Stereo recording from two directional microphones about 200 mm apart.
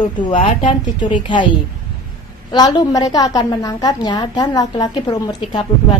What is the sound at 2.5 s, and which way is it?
A woman's voice, 20° left (ahead or behind).